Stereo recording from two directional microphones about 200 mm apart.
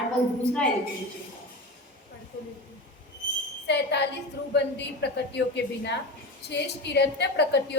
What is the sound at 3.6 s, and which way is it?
A woman's voice, 60° left (ahead or behind).